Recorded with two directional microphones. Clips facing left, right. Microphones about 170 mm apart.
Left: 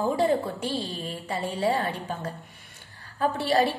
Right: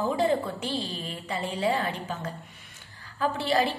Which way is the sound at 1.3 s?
30° left (ahead or behind).